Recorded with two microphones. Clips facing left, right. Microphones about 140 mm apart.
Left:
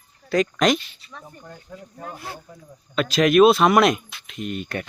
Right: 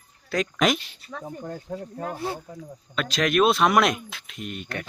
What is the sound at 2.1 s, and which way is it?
Speech, 30° right (ahead or behind).